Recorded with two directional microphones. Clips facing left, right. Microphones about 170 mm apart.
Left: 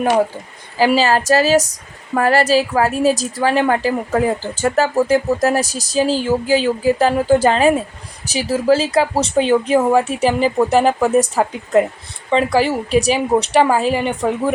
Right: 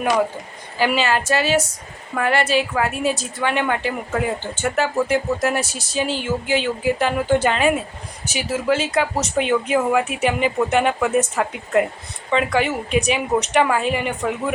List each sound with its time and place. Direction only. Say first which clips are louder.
0.8 s a woman's voice: left 5 dB; 35° left (ahead or behind)